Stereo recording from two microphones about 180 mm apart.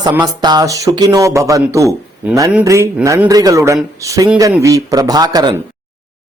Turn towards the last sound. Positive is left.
turn(degrees=-20)  # may be behind; listen again after turning